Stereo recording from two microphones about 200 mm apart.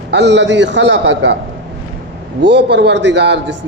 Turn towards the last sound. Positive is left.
turn(degrees=-60)  # may be behind; listen again after turning